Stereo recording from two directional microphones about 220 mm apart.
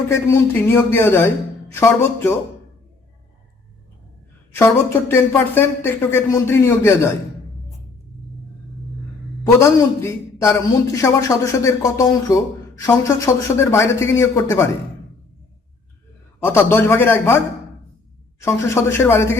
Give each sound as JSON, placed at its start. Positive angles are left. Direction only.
{"t": 0.1, "sound": "speech", "side_deg": 10}
{"t": 4.5, "sound": "speech", "side_deg": 10}
{"t": 9.5, "sound": "speech", "side_deg": 10}
{"t": 16.4, "sound": "speech", "side_deg": 10}
{"t": 18.3, "sound": "speech", "side_deg": 10}